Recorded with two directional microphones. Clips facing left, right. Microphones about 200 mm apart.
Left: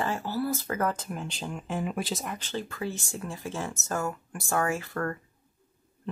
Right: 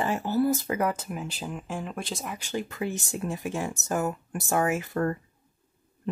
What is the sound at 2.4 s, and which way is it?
Speech, 15° right (ahead or behind).